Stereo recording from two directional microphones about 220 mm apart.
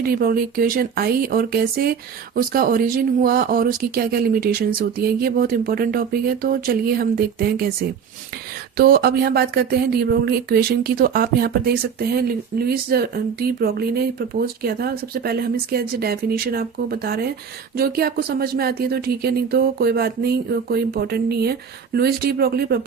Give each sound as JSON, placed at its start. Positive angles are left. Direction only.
{"t": 0.0, "sound": "speech", "side_deg": -45}